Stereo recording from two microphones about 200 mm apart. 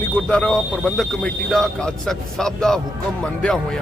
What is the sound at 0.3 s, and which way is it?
Speech, 5° left (ahead or behind).